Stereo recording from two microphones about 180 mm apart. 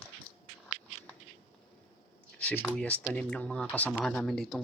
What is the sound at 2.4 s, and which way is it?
Speech, 5° left (ahead or behind).